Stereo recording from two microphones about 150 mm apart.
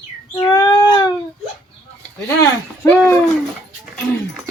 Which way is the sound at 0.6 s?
25° left (ahead or behind).